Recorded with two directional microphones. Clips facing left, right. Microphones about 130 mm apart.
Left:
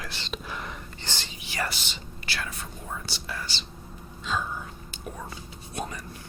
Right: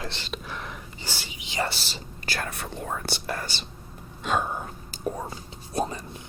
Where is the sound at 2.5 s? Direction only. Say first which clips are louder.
Right 5 dB; 70° right (ahead or behind); by 3.6 s 50° right (ahead or behind).